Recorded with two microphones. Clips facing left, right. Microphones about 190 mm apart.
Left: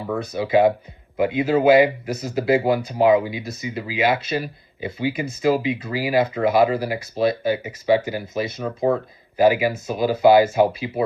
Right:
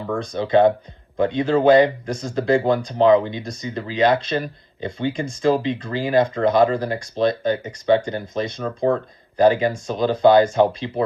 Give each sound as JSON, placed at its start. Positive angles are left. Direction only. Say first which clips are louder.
{"t": 0.2, "sound": "speech", "louder": "right 1 dB", "side_deg": 5}